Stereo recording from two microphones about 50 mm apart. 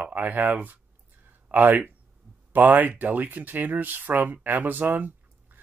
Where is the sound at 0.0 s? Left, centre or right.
Right.